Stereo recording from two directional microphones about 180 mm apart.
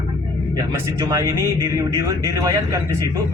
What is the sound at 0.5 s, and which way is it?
Speech, 20° right (ahead or behind).